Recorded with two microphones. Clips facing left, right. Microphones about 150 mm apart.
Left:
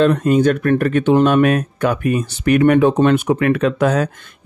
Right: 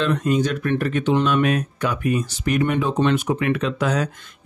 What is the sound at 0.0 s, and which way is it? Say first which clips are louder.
Speech: left 7 dB; 50° left (ahead or behind).